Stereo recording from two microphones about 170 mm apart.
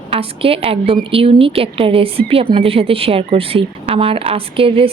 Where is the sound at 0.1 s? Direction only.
35° right (ahead or behind).